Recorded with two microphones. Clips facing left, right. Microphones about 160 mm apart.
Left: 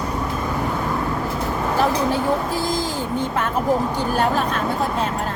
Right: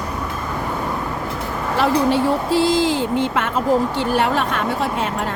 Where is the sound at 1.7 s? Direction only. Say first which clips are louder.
Right 4 dB; 90° right.